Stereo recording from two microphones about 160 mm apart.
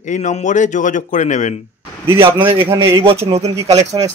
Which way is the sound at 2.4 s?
35° right (ahead or behind).